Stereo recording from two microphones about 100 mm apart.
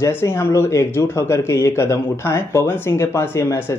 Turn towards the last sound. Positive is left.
turn(degrees=25)  # may be behind; listen again after turning